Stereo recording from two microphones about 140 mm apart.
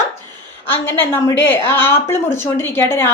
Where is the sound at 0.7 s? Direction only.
15° left (ahead or behind).